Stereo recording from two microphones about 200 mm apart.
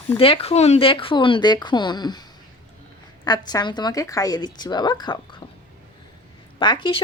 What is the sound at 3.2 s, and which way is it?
Speech, 20° left (ahead or behind).